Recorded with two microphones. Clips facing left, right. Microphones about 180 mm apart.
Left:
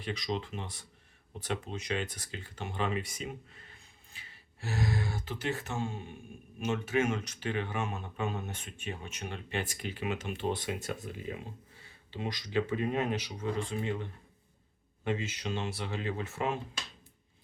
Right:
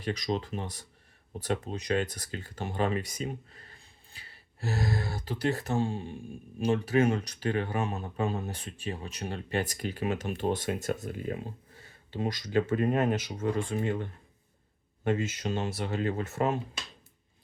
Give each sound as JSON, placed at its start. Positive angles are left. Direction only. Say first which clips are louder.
{"t": 0.0, "sound": "speech", "louder": "right 4 dB", "side_deg": -40}